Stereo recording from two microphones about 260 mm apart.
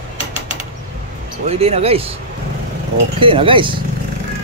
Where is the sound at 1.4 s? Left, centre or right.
Right.